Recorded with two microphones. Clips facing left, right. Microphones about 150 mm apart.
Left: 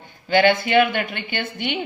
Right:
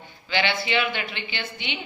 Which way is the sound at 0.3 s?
50° left (ahead or behind).